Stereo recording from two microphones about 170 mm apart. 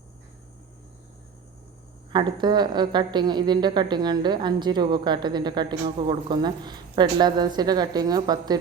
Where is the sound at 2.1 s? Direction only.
25° right (ahead or behind).